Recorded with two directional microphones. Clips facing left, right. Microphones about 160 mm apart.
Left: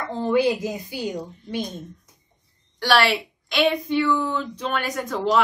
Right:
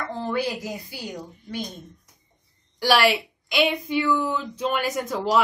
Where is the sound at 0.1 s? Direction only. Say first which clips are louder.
Left 8 dB; 20° left (ahead or behind).